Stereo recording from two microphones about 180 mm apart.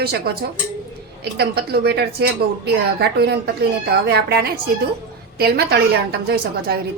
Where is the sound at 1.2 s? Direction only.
60° right (ahead or behind).